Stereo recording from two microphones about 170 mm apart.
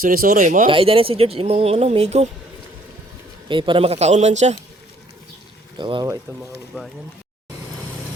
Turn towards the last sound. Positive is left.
turn(degrees=-15)  # may be behind; listen again after turning